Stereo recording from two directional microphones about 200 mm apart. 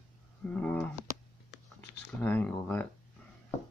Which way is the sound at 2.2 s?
10° left (ahead or behind).